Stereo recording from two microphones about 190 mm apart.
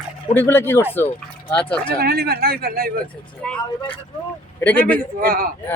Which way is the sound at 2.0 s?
55° right (ahead or behind).